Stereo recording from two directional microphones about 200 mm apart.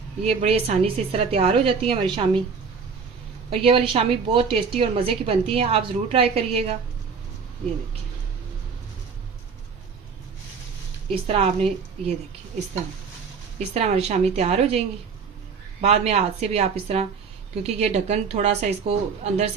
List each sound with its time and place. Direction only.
0.3 s a woman's voice: 30° right (ahead or behind)
3.5 s a woman's voice: 30° right (ahead or behind)
11.1 s a woman's voice: 30° right (ahead or behind)
13.7 s a woman's voice: 30° right (ahead or behind)